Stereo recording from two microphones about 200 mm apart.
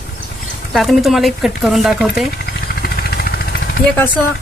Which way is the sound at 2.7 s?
50° left (ahead or behind).